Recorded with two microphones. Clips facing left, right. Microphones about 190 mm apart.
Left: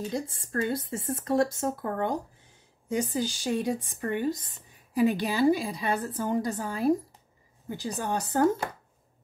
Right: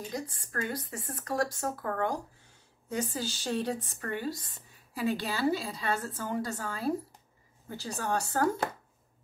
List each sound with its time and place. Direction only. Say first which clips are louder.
0.1 s speech: left 5 dB; 25° left (ahead or behind)